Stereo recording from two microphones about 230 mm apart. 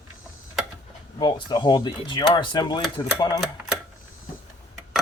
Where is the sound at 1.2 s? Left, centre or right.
Centre.